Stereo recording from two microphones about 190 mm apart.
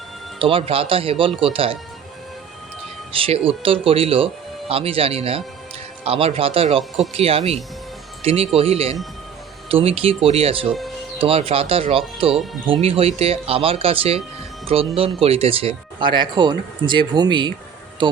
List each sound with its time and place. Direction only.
0.3 s speech: 30° right (ahead or behind)
3.1 s speech: 30° right (ahead or behind)
12.3 s speech: centre (ahead or behind)
12.8 s speech: 30° right (ahead or behind)